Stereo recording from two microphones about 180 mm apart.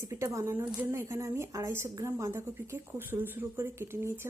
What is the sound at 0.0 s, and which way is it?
Speech, 15° right (ahead or behind).